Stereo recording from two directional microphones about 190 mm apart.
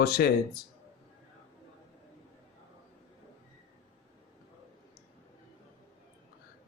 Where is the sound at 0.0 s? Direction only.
55° left (ahead or behind).